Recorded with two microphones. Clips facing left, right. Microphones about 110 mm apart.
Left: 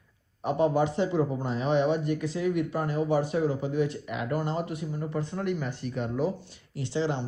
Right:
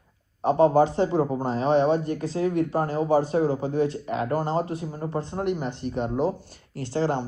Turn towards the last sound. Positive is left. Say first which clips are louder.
# right 4 dB
turn(degrees=-45)  # may be behind; listen again after turning